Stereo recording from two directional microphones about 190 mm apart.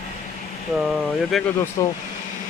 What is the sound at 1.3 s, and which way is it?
Speech, centre (ahead or behind).